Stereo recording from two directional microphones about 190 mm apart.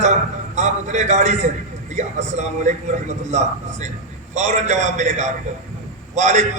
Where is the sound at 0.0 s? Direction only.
40° right (ahead or behind).